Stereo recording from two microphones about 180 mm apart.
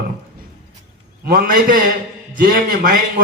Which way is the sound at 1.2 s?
60° right (ahead or behind).